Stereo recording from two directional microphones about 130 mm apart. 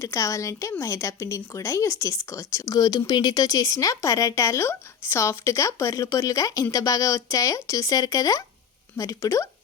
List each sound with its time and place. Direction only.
0.0 s speech: 25° left (ahead or behind)